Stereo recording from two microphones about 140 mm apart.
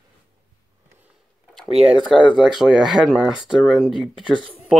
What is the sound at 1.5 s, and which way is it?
Speech, centre (ahead or behind).